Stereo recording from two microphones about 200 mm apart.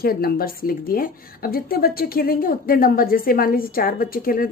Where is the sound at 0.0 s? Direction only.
50° left (ahead or behind).